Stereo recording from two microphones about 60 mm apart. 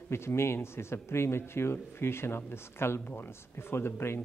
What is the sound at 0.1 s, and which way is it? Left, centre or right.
Speech, left.